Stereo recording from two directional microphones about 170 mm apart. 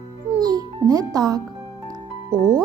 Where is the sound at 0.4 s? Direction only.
20° right (ahead or behind).